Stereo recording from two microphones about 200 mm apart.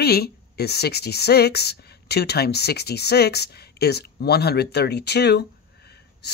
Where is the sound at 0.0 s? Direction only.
50° left (ahead or behind).